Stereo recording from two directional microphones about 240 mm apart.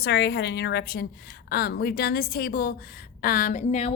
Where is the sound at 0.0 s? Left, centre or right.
Left.